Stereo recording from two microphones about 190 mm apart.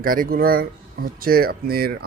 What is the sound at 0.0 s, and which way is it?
Speech, 50° right (ahead or behind).